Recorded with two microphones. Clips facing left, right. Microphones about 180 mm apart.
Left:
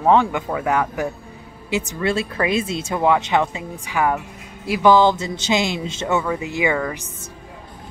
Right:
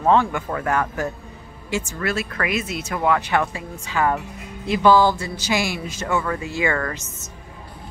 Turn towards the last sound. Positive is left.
turn(degrees=15)  # may be behind; listen again after turning